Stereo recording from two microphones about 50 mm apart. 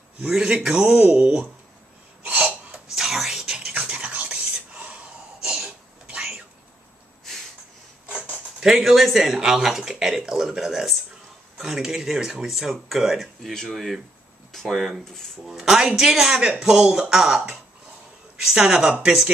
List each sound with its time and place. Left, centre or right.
0.7 s speech: centre
2.2 s hiccup: right
2.7 s a sound: centre
3.8 s whispering: right
5.5 s throat clearing: right
8.5 s speech: centre
13.4 s speech: centre
15.0 s speech: centre
15.4 s speech: centre